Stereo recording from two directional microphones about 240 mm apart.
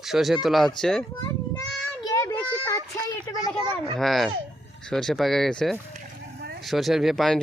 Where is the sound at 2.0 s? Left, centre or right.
Centre.